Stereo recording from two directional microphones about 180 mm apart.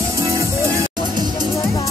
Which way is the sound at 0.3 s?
15° right (ahead or behind).